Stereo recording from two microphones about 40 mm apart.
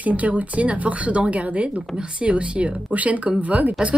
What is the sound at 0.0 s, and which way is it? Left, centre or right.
A woman's voice, right.